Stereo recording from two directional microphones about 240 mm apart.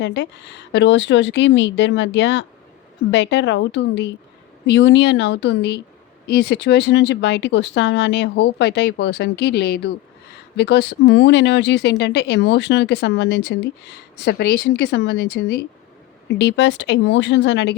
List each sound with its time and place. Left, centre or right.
0.0 s speech: left